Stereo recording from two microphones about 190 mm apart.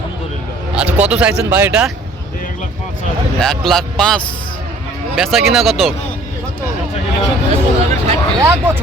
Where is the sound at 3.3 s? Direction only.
Centre (ahead or behind).